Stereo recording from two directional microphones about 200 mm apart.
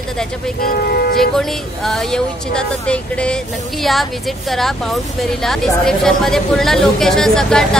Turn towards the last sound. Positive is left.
turn(degrees=5)  # may be behind; listen again after turning